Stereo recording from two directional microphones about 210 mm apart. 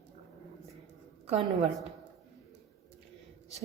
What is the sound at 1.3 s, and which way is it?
Speech, 30° right (ahead or behind).